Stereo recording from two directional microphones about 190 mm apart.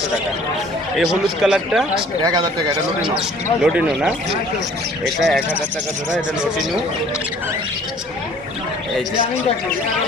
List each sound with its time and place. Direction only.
0.9 s speech: 5° right (ahead or behind)
2.2 s speech: 20° right (ahead or behind)
3.2 s speech: 5° right (ahead or behind)